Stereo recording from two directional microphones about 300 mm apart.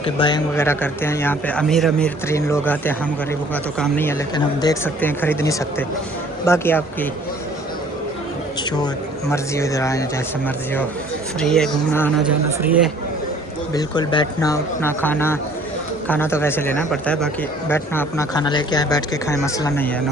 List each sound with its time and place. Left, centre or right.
0.0 s speech: centre
9.3 s speech: centre
11.3 s speech: centre
12.3 s speech: centre
13.7 s speech: centre